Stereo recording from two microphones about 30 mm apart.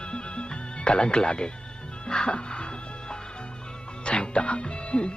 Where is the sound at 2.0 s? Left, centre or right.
Left.